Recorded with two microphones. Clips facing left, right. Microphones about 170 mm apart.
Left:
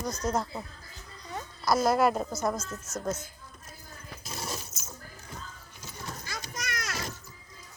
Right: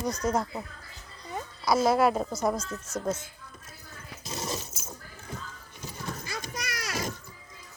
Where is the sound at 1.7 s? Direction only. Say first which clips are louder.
Right 1 dB; 5° right (ahead or behind).